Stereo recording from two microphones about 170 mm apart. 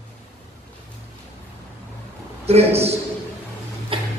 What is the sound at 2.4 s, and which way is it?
Speech, 35° right (ahead or behind).